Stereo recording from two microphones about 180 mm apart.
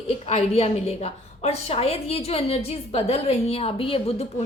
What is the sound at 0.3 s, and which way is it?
A woman's voice, 35° left (ahead or behind).